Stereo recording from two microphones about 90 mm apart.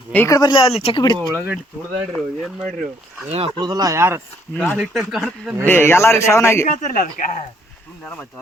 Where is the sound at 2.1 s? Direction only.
5° left (ahead or behind).